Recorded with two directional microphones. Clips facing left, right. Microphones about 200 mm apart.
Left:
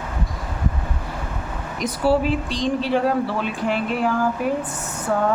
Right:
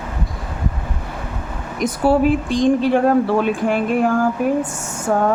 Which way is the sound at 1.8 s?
50° right (ahead or behind).